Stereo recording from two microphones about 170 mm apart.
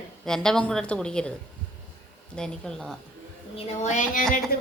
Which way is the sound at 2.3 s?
5° left (ahead or behind).